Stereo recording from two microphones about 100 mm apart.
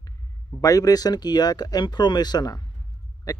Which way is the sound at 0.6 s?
35° left (ahead or behind).